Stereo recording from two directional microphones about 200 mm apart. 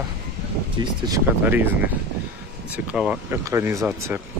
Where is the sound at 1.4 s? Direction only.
10° right (ahead or behind).